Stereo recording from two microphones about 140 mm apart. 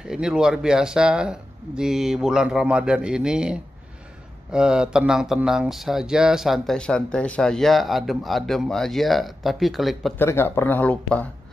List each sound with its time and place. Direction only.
0.1 s speech: 5° right (ahead or behind)
10.1 s speech: 15° left (ahead or behind)